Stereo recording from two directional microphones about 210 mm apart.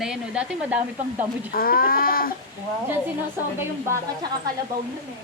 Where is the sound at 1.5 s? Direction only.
45° left (ahead or behind).